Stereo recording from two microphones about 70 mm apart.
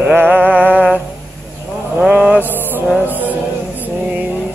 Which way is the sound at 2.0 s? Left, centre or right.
Centre.